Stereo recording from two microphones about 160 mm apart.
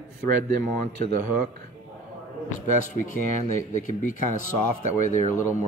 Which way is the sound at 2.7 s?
55° left (ahead or behind).